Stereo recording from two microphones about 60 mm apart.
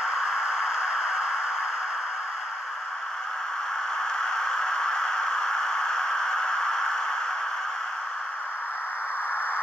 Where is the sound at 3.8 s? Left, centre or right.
Centre.